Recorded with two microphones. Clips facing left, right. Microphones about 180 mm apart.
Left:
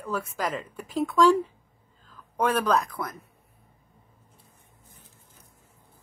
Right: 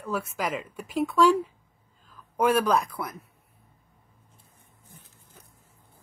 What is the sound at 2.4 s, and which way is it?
Speech, 10° right (ahead or behind).